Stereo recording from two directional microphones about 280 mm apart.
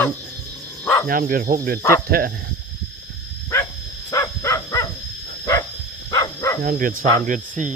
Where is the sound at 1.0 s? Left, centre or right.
Right.